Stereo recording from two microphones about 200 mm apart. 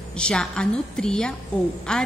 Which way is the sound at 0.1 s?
5° left (ahead or behind).